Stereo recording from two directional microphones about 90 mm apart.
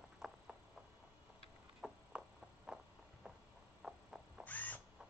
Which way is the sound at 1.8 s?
10° right (ahead or behind).